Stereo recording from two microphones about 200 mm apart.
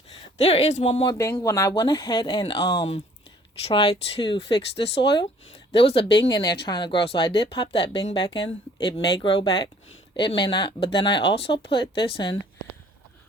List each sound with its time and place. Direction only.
0.4 s speech: 30° left (ahead or behind)
1.0 s speech: 15° left (ahead or behind)
6.1 s speech: 60° left (ahead or behind)
6.3 s speech: 20° left (ahead or behind)